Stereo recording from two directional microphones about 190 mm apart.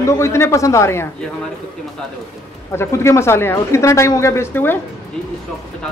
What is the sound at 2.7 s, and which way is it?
Speech, 15° left (ahead or behind).